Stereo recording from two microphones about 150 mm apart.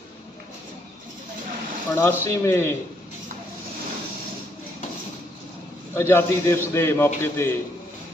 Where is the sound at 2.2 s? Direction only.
20° left (ahead or behind).